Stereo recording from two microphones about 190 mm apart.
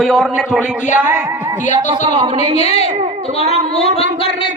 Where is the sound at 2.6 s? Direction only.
35° left (ahead or behind).